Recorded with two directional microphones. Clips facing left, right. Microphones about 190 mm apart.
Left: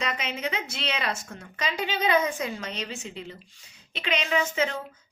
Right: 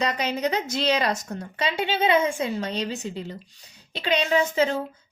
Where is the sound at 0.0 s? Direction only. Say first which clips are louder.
Right 6 dB; 40° right (ahead or behind).